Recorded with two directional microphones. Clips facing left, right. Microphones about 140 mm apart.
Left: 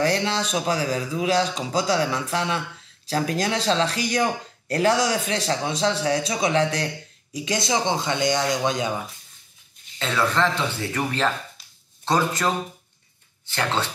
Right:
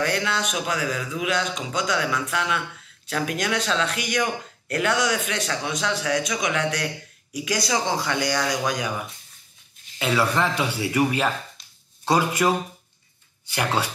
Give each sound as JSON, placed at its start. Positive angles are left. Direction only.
{"t": 0.0, "sound": "speech", "side_deg": 30}
{"t": 9.9, "sound": "speech", "side_deg": -10}